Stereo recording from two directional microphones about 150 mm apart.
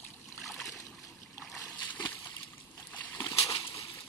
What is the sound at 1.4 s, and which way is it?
Splash, centre (ahead or behind).